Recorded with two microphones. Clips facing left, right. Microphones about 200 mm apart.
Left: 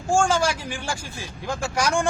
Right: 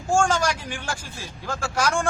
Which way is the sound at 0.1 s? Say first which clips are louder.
Left 1 dB; 10° left (ahead or behind).